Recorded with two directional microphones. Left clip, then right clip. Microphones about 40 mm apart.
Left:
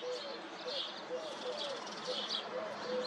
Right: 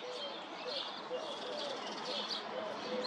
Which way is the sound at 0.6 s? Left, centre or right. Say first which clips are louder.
Left 1 dB; centre.